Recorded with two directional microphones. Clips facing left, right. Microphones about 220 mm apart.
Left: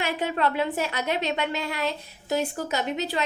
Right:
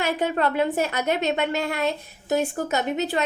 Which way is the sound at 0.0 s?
45° right (ahead or behind).